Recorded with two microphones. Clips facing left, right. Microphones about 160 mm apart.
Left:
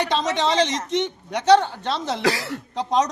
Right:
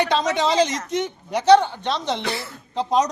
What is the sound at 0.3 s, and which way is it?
A man's voice, 5° right (ahead or behind).